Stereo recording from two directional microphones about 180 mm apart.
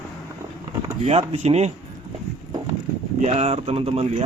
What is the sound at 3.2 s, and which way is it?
Speech, 35° right (ahead or behind).